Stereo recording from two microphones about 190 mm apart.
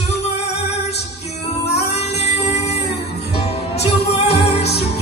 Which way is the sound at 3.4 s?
35° left (ahead or behind).